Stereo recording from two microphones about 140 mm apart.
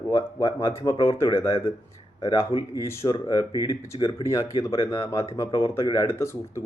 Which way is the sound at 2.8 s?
20° left (ahead or behind).